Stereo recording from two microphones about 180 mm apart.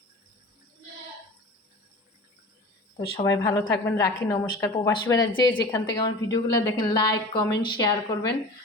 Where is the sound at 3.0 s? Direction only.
20° left (ahead or behind).